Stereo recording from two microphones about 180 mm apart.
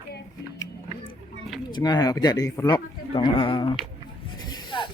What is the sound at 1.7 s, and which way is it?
Speech, 20° left (ahead or behind).